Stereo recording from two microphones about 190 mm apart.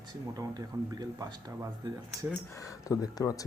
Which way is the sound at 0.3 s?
20° right (ahead or behind).